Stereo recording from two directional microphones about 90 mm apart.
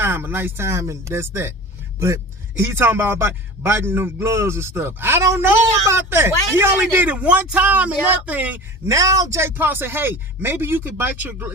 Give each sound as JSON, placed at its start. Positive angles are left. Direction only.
{"t": 0.0, "sound": "a man's voice", "side_deg": -25}
{"t": 2.6, "sound": "a man's voice", "side_deg": -25}
{"t": 8.9, "sound": "a man's voice", "side_deg": -35}